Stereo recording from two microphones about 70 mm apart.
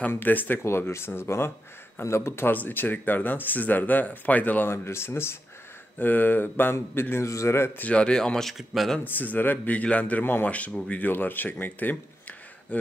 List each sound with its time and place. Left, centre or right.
0.1 s a man's voice: left
2.5 s speech: left
4.6 s a man's voice: left
7.8 s speech: centre
9.0 s speech: left